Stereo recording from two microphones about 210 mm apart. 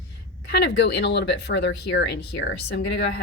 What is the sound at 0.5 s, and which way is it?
Speech, 55° left (ahead or behind).